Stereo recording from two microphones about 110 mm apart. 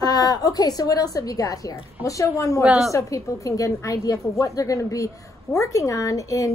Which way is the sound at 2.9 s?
30° left (ahead or behind).